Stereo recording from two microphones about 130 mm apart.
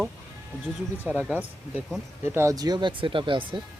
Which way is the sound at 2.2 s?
20° right (ahead or behind).